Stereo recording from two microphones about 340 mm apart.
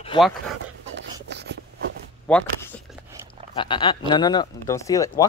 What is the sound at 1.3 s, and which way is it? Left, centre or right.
Writing, right.